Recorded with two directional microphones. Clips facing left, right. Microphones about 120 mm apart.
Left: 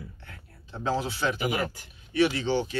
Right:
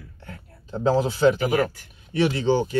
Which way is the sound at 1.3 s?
35° right (ahead or behind).